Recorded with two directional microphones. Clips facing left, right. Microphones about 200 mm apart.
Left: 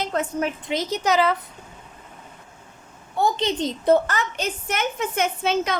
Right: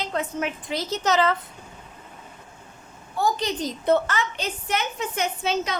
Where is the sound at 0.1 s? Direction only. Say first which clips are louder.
Left 3 dB; 40° left (ahead or behind).